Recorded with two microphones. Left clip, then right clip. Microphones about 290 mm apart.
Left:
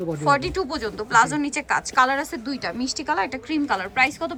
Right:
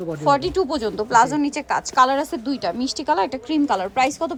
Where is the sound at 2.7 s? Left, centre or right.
Right.